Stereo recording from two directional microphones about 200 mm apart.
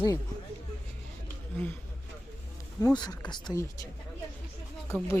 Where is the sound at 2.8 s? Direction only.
20° left (ahead or behind).